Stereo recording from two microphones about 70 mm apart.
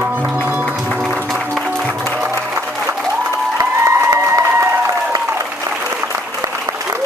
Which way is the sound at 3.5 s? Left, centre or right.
Right.